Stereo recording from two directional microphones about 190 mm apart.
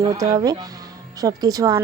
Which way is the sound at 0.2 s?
20° right (ahead or behind).